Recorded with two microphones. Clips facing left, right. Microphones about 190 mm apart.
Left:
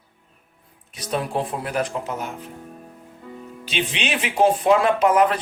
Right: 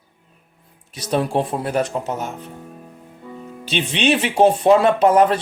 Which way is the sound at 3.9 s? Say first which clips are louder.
Right 9 dB; 30° right (ahead or behind).